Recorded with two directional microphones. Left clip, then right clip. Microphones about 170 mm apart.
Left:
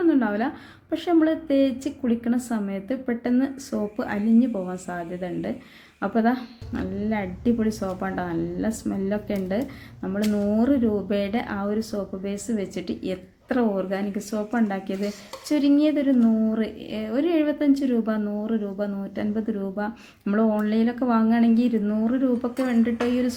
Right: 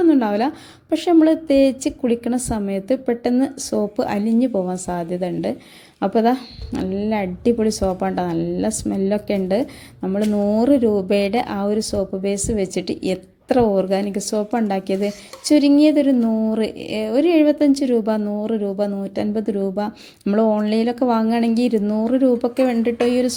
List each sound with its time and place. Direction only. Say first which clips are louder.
0.0 s speech: right 6 dB; 40° right (ahead or behind)